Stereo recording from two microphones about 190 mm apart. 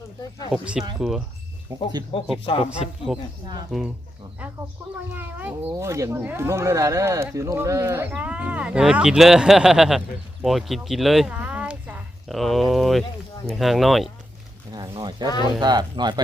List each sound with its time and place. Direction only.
0.5 s speech: 5° right (ahead or behind)
2.1 s speech: 25° left (ahead or behind)
3.1 s speech: centre (ahead or behind)
14.7 s speech: 20° right (ahead or behind)